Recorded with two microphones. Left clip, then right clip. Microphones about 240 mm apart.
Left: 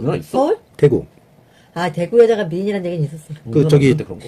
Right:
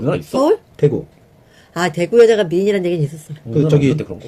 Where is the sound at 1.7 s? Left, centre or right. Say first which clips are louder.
Right 1 dB; right.